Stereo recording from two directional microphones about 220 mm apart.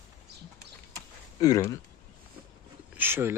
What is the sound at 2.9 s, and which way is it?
Speech, 10° right (ahead or behind).